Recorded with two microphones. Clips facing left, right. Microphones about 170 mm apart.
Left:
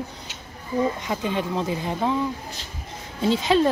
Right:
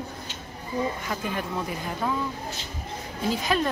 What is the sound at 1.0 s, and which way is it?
Speech, 20° left (ahead or behind).